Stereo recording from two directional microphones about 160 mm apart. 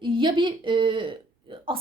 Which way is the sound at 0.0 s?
30° right (ahead or behind).